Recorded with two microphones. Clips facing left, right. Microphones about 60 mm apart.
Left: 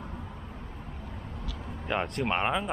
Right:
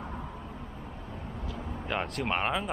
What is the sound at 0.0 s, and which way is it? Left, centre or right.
Vehicle, right.